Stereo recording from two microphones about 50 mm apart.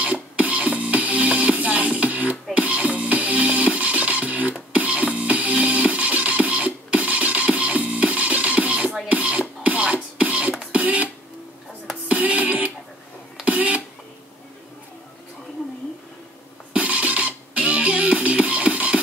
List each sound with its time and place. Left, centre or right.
0.0 s music: right
10.7 s printer: right
12.1 s music: right
13.5 s a sound: right
16.7 s music: right